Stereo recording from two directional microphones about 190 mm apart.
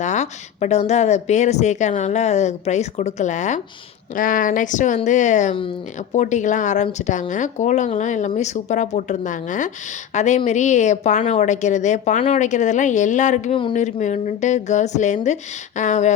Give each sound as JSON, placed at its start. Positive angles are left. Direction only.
{"t": 0.0, "sound": "a woman's voice", "side_deg": 40}